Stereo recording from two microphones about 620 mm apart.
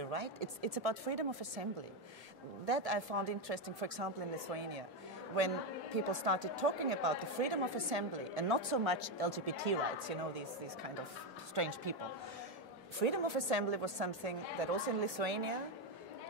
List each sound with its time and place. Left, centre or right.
0.0 s speech: right
2.6 s speech: right
11.5 s speech: right
13.0 s a woman's voice: right